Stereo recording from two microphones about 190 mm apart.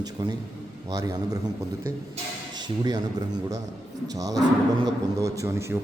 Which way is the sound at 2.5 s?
20° right (ahead or behind).